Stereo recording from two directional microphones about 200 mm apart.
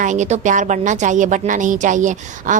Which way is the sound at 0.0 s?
35° right (ahead or behind).